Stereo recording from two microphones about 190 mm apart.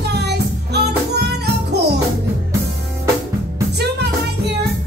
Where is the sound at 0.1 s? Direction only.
60° right (ahead or behind).